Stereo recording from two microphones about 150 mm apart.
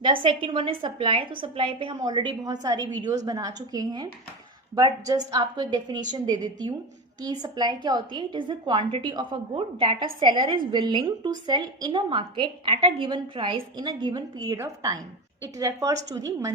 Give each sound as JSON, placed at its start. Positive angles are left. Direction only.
{"t": 0.0, "sound": "a woman's voice", "side_deg": -35}